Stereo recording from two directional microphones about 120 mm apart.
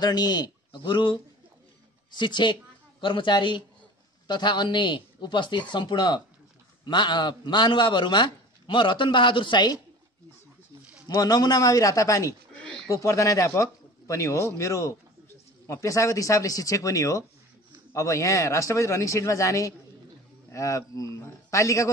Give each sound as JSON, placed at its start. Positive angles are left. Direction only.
{"t": 0.0, "sound": "a man's voice", "side_deg": 35}
{"t": 11.1, "sound": "a man's voice", "side_deg": 35}